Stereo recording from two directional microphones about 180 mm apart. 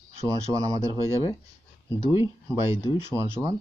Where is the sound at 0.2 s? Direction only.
20° right (ahead or behind).